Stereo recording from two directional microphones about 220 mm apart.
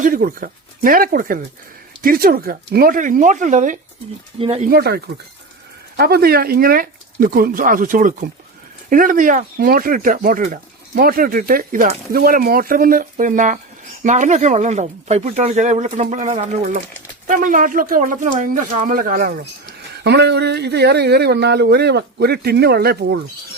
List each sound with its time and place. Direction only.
0.0 s speech: 40° right (ahead or behind)
4.7 s speech: 45° right (ahead or behind)